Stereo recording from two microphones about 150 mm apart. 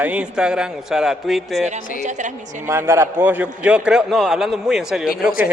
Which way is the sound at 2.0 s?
55° right (ahead or behind).